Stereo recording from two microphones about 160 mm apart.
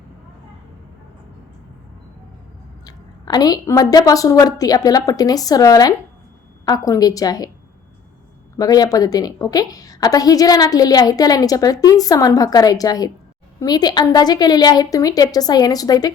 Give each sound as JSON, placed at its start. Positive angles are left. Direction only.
{"t": 2.8, "sound": "a woman's voice", "side_deg": 25}
{"t": 8.5, "sound": "a woman's voice", "side_deg": 25}